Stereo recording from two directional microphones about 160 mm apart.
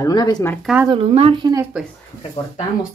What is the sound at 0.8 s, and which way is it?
Speech, 35° right (ahead or behind).